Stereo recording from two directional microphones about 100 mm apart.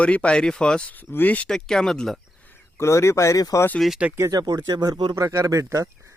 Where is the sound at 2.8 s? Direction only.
30° left (ahead or behind).